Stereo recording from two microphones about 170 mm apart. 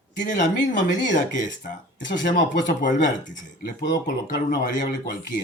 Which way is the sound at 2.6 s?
90° left.